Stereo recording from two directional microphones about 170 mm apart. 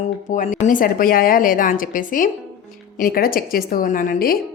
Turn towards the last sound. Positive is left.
turn(degrees=55)  # may be behind; listen again after turning